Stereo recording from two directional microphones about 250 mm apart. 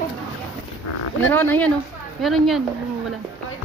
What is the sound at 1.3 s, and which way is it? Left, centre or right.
A woman's voice, centre.